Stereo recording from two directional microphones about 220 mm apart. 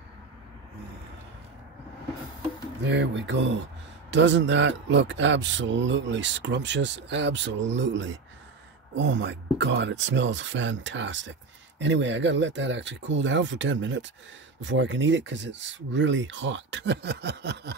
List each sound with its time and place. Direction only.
2.8 s speech: 55° right (ahead or behind)